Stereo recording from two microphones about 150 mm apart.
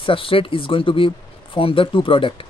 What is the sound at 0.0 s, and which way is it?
Speech, 35° left (ahead or behind).